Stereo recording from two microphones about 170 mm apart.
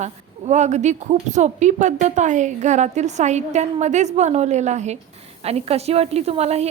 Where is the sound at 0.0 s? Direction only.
40° right (ahead or behind).